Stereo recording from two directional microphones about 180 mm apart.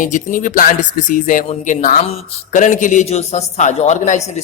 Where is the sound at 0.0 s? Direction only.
45° left (ahead or behind).